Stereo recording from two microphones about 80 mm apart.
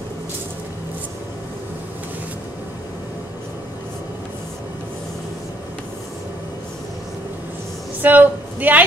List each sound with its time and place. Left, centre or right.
8.0 s a woman's voice: right